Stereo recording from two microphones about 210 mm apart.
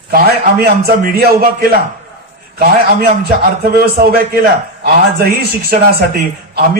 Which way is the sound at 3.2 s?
45° right (ahead or behind).